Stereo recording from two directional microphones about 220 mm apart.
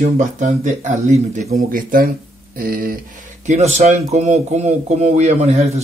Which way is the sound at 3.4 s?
30° right (ahead or behind).